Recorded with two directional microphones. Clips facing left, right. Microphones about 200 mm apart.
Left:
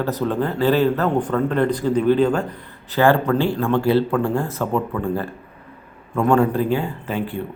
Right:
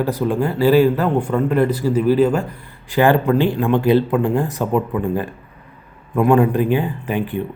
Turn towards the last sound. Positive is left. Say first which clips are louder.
# right 3 dB
turn(degrees=-15)  # may be behind; listen again after turning